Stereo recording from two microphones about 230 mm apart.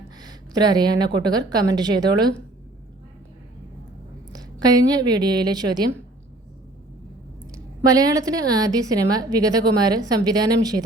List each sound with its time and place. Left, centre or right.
0.2 s a woman's voice: centre
4.3 s a woman's voice: centre
7.5 s a woman's voice: centre